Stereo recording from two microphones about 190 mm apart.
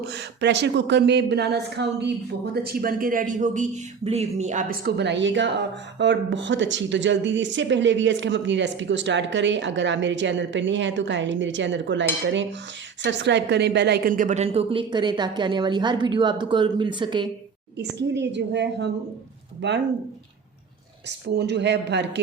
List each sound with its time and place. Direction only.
0.0 s a woman's voice: 65° right (ahead or behind); by 17.2 s 25° right (ahead or behind)
18.1 s speech: 65° right (ahead or behind)
21.1 s speech: 65° right (ahead or behind)